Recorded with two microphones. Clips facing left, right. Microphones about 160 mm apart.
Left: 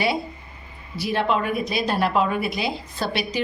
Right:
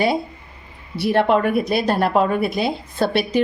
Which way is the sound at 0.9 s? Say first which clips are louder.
Right 6 dB; 60° right (ahead or behind).